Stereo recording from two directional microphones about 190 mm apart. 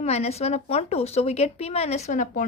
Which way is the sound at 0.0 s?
35° left (ahead or behind).